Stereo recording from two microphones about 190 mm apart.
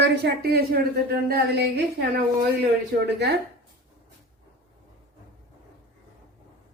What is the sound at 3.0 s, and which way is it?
Speech, 60° right (ahead or behind).